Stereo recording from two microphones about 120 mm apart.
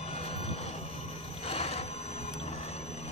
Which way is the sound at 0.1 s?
60° left (ahead or behind).